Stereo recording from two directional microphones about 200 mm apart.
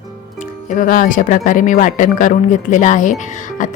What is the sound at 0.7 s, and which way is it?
Speech, 40° left (ahead or behind).